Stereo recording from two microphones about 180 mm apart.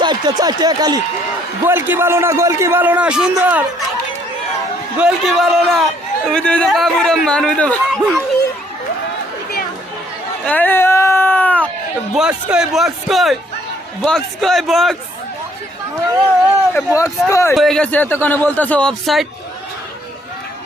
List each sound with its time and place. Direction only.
0.0 s a man's voice: 25° right (ahead or behind); by 3.6 s 5° right (ahead or behind)
4.9 s a man's voice: 5° right (ahead or behind)
10.4 s a sound: 10° left (ahead or behind)
12.1 s a man's voice: 5° right (ahead or behind)
16.7 s a man's voice: 15° left (ahead or behind)
17.5 s a man's voice: centre (ahead or behind)